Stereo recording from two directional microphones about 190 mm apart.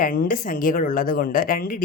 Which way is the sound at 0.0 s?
45° left (ahead or behind).